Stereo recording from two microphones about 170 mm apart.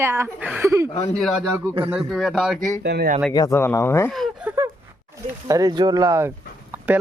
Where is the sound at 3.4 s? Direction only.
15° left (ahead or behind).